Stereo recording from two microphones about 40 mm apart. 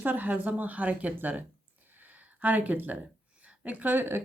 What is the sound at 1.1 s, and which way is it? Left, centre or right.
Speech, right.